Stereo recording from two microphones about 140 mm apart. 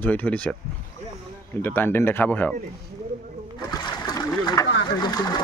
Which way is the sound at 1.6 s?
15° left (ahead or behind).